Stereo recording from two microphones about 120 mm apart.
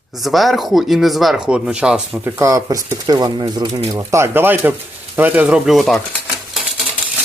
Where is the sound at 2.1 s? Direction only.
25° right (ahead or behind); by 6.0 s centre (ahead or behind).